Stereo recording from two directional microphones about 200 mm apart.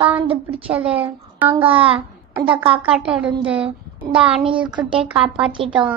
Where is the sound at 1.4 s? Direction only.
10° right (ahead or behind).